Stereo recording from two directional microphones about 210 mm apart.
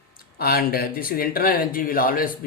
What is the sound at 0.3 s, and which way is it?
Speech, 45° left (ahead or behind).